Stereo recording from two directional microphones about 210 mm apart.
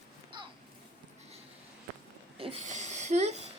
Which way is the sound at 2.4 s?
30° right (ahead or behind).